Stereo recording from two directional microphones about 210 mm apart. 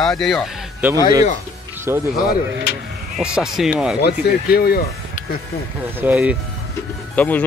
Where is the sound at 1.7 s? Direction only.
10° right (ahead or behind).